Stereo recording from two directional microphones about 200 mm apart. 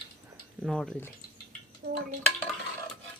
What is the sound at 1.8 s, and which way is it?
Dishes, 55° right (ahead or behind).